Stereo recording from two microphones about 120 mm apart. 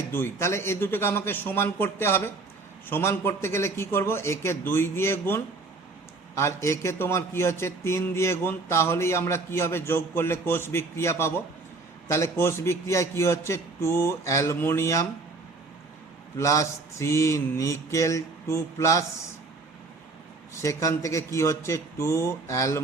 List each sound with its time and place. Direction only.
0.1 s a man's voice: 20° left (ahead or behind)
16.4 s a man's voice: 25° left (ahead or behind)
20.6 s a man's voice: 25° left (ahead or behind)